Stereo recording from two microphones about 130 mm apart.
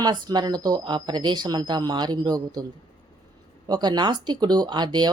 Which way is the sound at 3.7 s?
35° right (ahead or behind).